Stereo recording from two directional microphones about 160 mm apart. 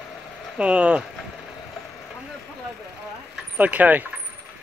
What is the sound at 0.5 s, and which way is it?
Speech, 5° right (ahead or behind).